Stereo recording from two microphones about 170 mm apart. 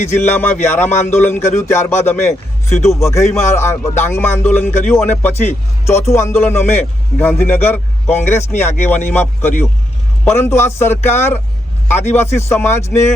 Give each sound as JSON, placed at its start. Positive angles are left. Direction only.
{"t": 0.3, "sound": "a man's voice", "side_deg": 15}